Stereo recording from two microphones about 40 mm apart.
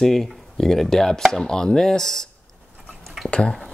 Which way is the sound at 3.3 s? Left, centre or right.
Left.